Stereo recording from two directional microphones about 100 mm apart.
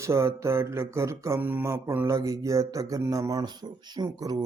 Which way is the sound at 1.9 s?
25° right (ahead or behind).